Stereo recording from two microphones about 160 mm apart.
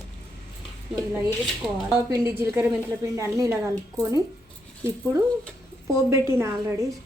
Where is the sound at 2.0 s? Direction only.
20° right (ahead or behind).